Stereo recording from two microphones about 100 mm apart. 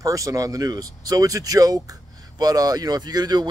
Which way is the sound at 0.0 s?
35° right (ahead or behind).